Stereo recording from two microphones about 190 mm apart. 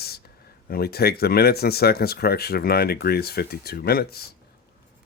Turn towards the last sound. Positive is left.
turn(degrees=55)  # may be behind; listen again after turning